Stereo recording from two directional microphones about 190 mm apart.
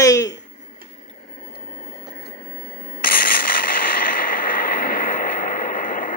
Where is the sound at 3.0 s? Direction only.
50° left (ahead or behind).